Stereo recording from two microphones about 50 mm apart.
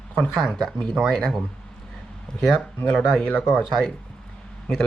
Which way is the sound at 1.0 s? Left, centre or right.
Centre.